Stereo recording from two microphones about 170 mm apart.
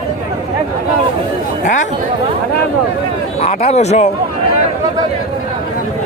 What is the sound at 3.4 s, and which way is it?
Speech, 40° left (ahead or behind).